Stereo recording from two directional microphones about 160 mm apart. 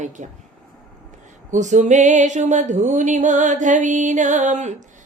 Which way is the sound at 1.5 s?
50° right (ahead or behind).